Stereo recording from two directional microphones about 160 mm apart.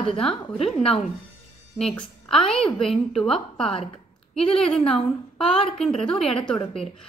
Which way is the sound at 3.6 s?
35° left (ahead or behind).